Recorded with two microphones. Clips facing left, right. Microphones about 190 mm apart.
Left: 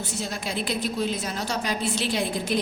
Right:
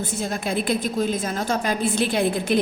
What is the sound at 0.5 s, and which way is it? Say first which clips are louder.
A woman's voice: right 4 dB; 50° right (ahead or behind).